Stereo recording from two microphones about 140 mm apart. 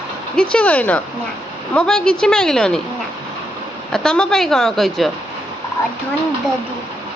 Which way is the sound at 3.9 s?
5° left (ahead or behind).